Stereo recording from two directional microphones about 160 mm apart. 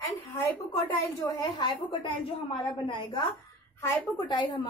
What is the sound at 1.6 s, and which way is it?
A woman's voice, 30° left (ahead or behind).